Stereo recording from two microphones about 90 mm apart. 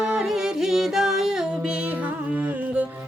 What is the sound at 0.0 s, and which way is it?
Music, 5° right (ahead or behind).